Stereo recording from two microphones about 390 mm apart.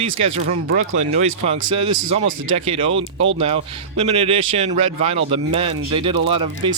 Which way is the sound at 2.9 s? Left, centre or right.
Right.